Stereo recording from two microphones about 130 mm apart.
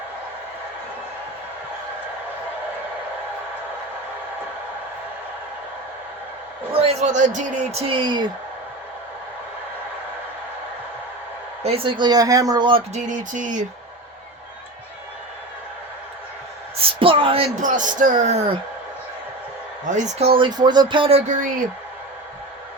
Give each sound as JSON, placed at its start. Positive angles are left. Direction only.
{"t": 6.7, "sound": "speech", "side_deg": -60}
{"t": 11.6, "sound": "speech", "side_deg": -45}
{"t": 12.9, "sound": "speech", "side_deg": -70}
{"t": 16.7, "sound": "a sound", "side_deg": -45}
{"t": 17.6, "sound": "speech", "side_deg": -75}
{"t": 19.9, "sound": "speech", "side_deg": -55}